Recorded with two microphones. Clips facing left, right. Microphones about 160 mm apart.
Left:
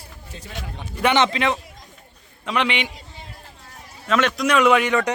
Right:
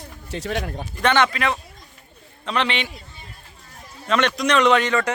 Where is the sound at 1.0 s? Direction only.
10° left (ahead or behind).